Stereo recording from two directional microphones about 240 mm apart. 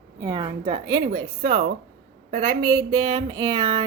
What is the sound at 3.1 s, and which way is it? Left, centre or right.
Speech, right.